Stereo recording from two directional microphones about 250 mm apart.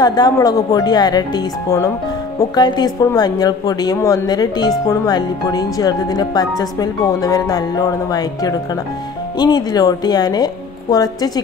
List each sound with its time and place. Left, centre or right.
0.0 s a woman's voice: centre